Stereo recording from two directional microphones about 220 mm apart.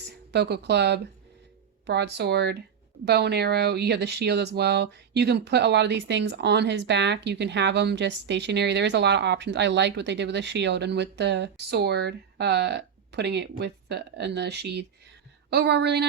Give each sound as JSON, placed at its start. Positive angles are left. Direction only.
{"t": 0.3, "sound": "speech", "side_deg": -50}